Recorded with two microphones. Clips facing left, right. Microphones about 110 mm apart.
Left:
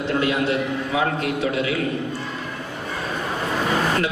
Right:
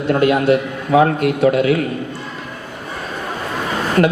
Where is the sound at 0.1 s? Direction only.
50° right (ahead or behind).